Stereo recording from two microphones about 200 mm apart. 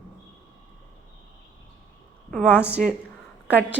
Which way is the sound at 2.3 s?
5° left (ahead or behind).